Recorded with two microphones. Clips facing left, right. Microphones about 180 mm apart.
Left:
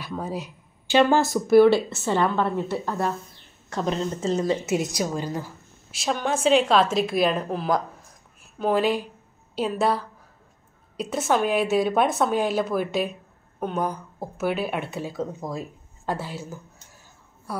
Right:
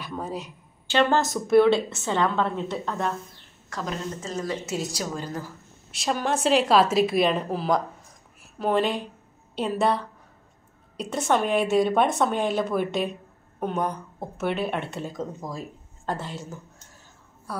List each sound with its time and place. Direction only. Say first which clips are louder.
0.0 s speech: left 2 dB; 5° left (ahead or behind)
3.7 s a woman's voice: left 5 dB; 25° left (ahead or behind)
5.9 s a woman's voice: even; centre (ahead or behind)